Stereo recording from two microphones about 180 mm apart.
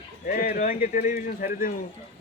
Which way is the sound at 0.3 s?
50° left (ahead or behind).